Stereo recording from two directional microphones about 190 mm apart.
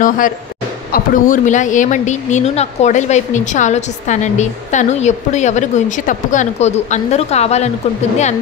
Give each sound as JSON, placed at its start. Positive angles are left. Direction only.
{"t": 0.9, "sound": "a woman's voice", "side_deg": 45}